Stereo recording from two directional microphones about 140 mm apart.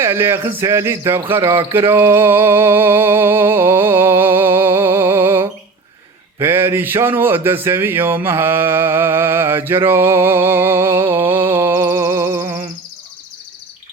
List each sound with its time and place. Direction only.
0.0 s speech: 15° right (ahead or behind)